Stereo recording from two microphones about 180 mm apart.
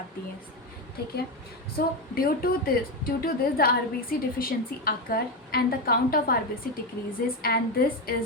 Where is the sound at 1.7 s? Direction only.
55° left (ahead or behind).